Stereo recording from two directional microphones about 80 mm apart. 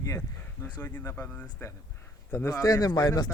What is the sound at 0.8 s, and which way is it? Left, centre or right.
Speech, left.